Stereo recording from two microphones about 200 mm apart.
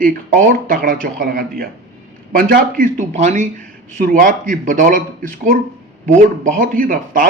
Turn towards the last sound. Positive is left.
turn(degrees=-45)  # may be behind; listen again after turning